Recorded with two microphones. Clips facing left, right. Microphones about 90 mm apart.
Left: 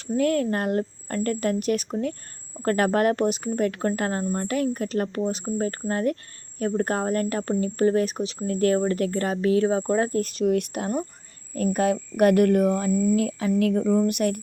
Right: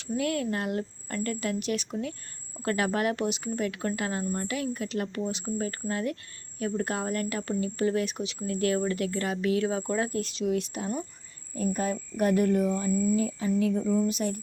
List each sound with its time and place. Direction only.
0.1 s speech: 40° left (ahead or behind); by 11.0 s 55° left (ahead or behind)
11.5 s speech: 75° left (ahead or behind)